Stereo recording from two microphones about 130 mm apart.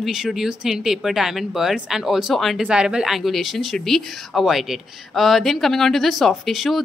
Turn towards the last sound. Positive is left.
turn(degrees=0)  # may be behind; listen again after turning